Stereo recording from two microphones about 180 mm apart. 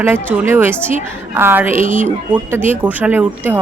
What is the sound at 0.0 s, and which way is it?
Speech, 10° right (ahead or behind).